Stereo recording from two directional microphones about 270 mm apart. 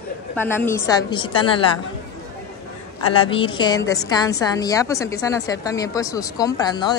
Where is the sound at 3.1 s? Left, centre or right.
Centre.